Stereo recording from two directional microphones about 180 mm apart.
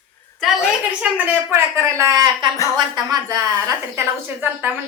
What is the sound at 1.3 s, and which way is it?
A woman's voice, 15° right (ahead or behind).